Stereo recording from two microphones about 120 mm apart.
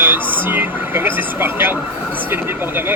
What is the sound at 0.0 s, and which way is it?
Speech, 15° right (ahead or behind).